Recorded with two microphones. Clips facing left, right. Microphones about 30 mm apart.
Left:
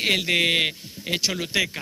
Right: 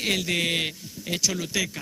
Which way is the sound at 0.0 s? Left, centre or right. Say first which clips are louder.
Left 4 dB; left.